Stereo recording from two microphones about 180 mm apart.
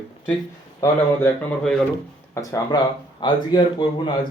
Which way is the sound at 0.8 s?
10° left (ahead or behind).